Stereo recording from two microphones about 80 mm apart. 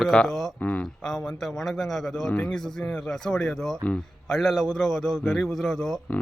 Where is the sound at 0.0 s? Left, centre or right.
Centre.